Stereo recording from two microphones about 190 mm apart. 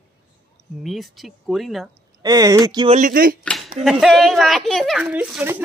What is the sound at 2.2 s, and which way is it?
Speech, 20° right (ahead or behind).